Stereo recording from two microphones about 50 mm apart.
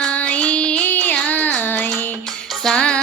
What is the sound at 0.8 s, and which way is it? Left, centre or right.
Music, left.